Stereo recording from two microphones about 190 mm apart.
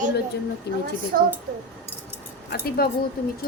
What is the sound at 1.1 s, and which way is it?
Speech, 50° right (ahead or behind).